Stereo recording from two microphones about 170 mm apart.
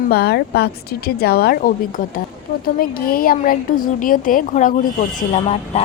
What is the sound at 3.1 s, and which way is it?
Speech, 60° left (ahead or behind).